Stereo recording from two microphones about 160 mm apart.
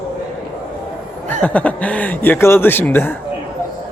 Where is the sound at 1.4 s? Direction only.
10° left (ahead or behind).